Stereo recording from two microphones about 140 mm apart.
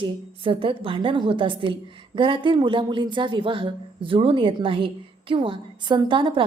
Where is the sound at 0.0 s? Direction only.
40° right (ahead or behind).